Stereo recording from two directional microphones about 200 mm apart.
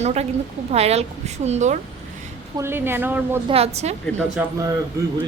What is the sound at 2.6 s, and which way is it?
Speech, 10° right (ahead or behind).